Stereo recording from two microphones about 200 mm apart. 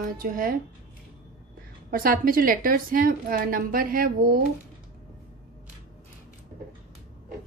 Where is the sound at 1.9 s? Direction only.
45° right (ahead or behind).